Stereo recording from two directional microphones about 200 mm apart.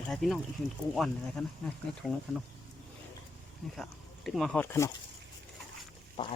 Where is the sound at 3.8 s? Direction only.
Centre (ahead or behind).